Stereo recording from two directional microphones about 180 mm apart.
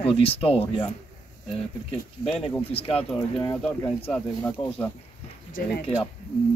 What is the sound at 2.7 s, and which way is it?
Speech, 35° left (ahead or behind).